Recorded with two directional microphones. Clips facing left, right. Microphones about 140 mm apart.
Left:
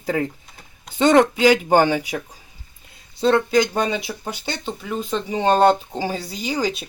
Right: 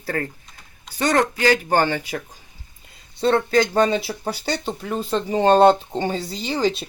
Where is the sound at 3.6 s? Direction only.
30° right (ahead or behind).